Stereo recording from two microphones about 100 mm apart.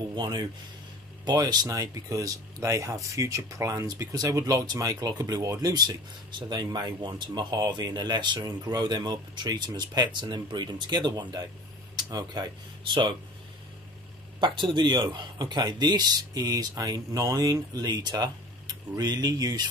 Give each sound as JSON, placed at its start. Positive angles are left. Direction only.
{"t": 0.1, "sound": "speech", "side_deg": -45}
{"t": 14.4, "sound": "speech", "side_deg": -55}